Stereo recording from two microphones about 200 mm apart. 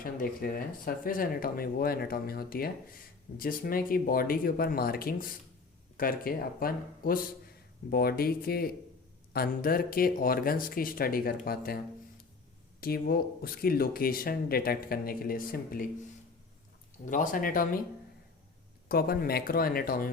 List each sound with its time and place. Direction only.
0.0 s speech: 45° left (ahead or behind)
17.1 s speech: 40° left (ahead or behind)
18.9 s speech: 50° left (ahead or behind)